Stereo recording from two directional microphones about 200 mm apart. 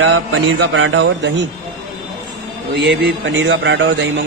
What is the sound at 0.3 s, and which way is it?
A man's voice, 80° right.